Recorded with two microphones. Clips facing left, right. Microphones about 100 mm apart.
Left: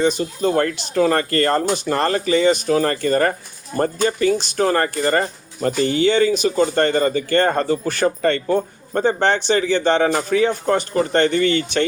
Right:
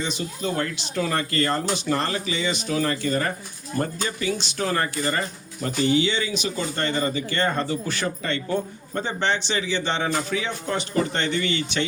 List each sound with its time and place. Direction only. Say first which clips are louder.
0.0 s speech: left 10 dB; 45° left (ahead or behind)